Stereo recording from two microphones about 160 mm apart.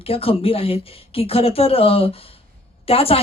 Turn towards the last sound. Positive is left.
turn(degrees=35)  # may be behind; listen again after turning